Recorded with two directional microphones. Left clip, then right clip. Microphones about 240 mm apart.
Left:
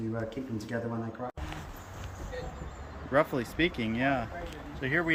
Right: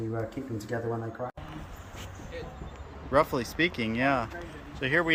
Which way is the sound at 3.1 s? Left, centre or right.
Centre.